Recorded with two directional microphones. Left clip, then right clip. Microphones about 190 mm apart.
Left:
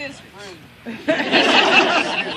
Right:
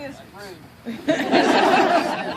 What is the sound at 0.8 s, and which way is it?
Speech, 25° left (ahead or behind).